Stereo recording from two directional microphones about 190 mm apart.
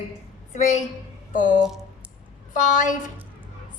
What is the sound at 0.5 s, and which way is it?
Speech, 40° left (ahead or behind).